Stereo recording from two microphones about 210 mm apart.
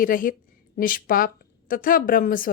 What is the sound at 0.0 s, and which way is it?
A woman's voice, 40° left (ahead or behind).